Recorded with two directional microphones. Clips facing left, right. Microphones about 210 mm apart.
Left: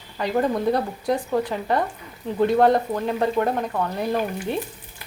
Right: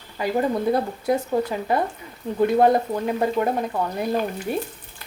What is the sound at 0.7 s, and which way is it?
Frying, 5° right (ahead or behind).